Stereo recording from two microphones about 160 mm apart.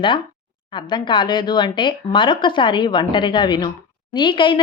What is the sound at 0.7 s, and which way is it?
Speech, 30° left (ahead or behind).